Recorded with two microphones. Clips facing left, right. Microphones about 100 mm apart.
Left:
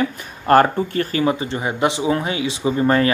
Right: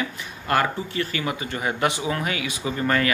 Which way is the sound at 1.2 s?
30° left (ahead or behind).